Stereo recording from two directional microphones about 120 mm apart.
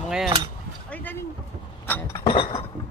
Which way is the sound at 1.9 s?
15° left (ahead or behind).